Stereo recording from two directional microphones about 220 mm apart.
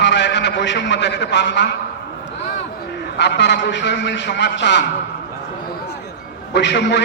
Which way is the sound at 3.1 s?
50° left (ahead or behind).